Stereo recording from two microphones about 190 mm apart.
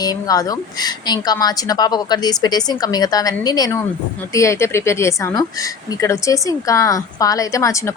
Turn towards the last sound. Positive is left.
turn(degrees=15)  # may be behind; listen again after turning